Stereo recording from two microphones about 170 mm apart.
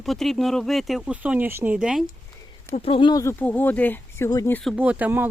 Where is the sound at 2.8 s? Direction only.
35° left (ahead or behind); by 4.5 s 20° left (ahead or behind).